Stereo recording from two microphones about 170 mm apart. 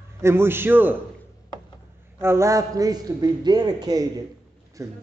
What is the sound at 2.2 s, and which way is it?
A man's voice, 15° right (ahead or behind).